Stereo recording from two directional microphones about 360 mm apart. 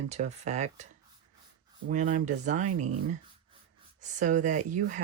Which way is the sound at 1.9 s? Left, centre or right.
Right.